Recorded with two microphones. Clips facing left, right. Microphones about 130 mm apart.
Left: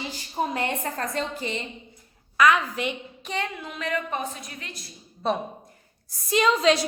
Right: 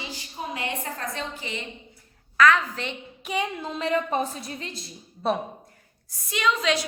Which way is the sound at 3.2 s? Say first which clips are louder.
Right 4 dB; 10° right (ahead or behind).